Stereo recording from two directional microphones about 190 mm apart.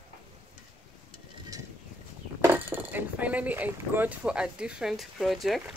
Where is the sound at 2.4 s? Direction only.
10° right (ahead or behind).